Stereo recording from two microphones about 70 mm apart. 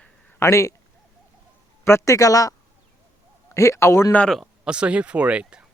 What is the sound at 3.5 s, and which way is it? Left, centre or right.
Speech, left.